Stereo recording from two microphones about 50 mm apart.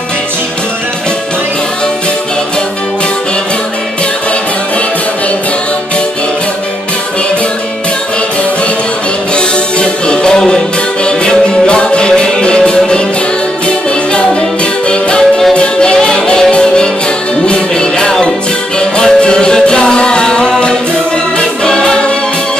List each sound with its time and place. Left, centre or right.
9.8 s music: centre
14.9 s music: centre